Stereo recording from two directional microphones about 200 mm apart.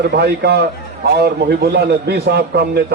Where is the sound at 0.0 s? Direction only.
55° right (ahead or behind).